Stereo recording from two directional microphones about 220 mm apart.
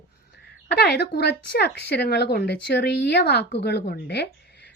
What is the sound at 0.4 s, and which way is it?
Speech, 45° left (ahead or behind).